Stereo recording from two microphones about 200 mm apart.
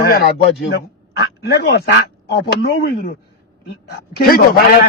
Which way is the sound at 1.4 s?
55° left (ahead or behind).